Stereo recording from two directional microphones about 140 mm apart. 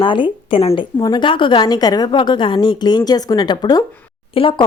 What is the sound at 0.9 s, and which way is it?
A woman's voice, 30° left (ahead or behind).